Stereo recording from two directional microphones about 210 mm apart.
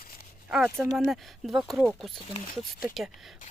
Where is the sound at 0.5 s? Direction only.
Centre (ahead or behind).